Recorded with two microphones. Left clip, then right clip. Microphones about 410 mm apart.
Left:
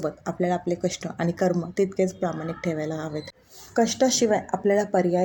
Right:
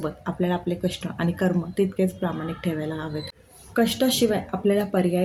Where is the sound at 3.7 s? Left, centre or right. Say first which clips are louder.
Even; right.